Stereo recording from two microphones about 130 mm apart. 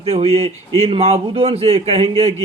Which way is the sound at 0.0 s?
50° right (ahead or behind).